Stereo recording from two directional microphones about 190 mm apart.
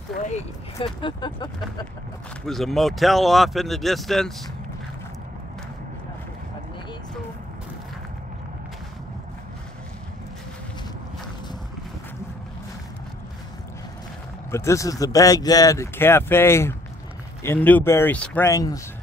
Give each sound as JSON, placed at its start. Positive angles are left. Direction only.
{"t": 0.4, "sound": "speech", "side_deg": 30}
{"t": 2.4, "sound": "speech", "side_deg": 0}
{"t": 14.5, "sound": "speech", "side_deg": 15}